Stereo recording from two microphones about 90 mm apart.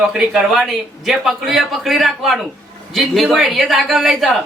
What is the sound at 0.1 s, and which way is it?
Speech, 5° right (ahead or behind).